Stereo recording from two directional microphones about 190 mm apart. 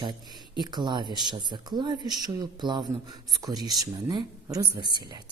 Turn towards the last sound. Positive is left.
turn(degrees=-20)  # may be behind; listen again after turning